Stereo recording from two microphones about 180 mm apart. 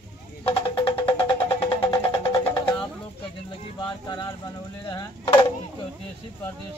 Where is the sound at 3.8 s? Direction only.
25° left (ahead or behind).